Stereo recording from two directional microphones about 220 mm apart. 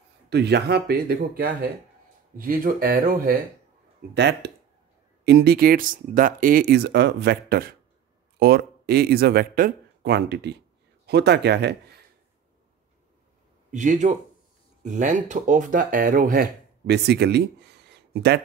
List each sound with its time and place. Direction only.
0.3 s speech: 50° right (ahead or behind)
13.7 s speech: 35° right (ahead or behind)